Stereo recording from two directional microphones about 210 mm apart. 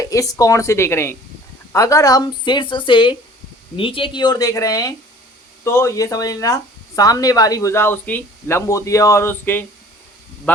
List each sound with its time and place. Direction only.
0.0 s speech: 15° left (ahead or behind)